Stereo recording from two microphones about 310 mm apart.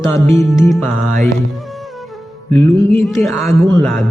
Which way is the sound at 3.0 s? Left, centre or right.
Centre.